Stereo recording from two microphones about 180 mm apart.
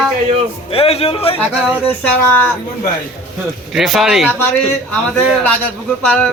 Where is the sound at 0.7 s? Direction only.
35° left (ahead or behind).